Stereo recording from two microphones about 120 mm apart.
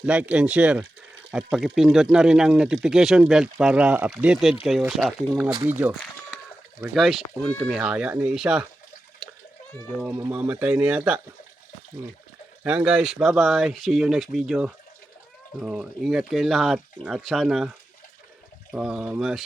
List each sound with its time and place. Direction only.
0.0 s speech: 10° right (ahead or behind)
5.6 s speech: 15° right (ahead or behind)
6.8 s speech: centre (ahead or behind)
10.0 s speech: 20° right (ahead or behind)
12.6 s speech: 5° right (ahead or behind)